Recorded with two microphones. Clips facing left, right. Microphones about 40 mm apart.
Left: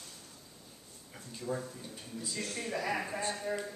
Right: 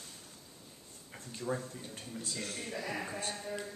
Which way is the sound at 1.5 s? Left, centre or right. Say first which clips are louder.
Even; right.